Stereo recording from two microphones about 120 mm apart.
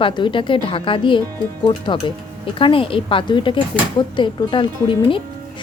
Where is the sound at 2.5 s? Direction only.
45° left (ahead or behind).